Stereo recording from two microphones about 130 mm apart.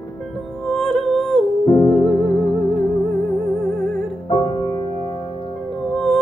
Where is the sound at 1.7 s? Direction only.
25° left (ahead or behind).